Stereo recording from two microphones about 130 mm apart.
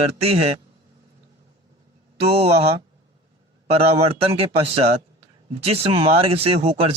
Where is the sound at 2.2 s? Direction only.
50° right (ahead or behind).